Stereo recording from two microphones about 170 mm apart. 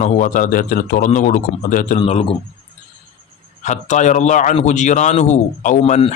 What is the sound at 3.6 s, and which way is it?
Speech, 45° left (ahead or behind).